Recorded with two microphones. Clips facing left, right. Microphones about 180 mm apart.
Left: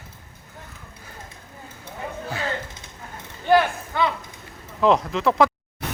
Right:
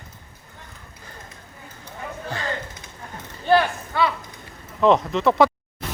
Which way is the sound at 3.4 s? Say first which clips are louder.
Even; 15° left (ahead or behind).